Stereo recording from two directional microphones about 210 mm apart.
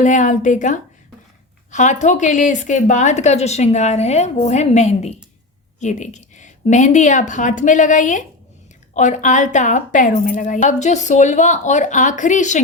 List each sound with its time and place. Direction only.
0.0 s a woman's voice: 35° left (ahead or behind)